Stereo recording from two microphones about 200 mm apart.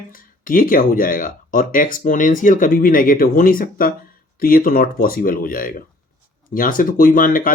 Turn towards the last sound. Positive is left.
turn(degrees=45)  # may be behind; listen again after turning